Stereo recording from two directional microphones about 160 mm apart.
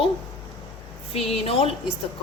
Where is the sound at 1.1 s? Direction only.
35° left (ahead or behind).